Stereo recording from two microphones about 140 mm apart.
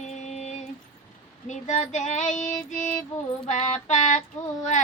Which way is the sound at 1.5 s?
60° left (ahead or behind).